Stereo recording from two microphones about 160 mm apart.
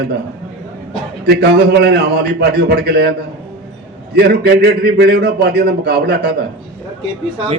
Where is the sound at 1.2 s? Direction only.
90° right.